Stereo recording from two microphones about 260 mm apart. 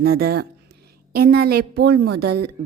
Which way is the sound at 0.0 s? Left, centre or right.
Right.